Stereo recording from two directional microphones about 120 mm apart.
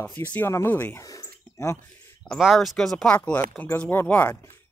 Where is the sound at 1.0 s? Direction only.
25° left (ahead or behind).